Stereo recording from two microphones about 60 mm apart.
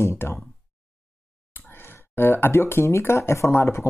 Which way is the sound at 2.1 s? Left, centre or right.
Left.